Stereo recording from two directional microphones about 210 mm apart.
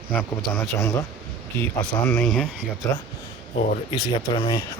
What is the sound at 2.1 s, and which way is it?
Speech, 5° left (ahead or behind).